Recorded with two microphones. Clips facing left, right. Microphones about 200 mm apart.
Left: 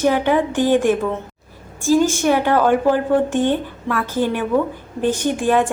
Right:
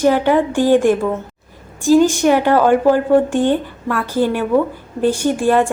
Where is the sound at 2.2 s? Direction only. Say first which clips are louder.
Right 3 dB; 10° right (ahead or behind).